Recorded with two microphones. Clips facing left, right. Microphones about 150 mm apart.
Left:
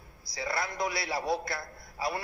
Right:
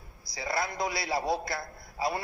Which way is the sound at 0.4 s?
20° right (ahead or behind).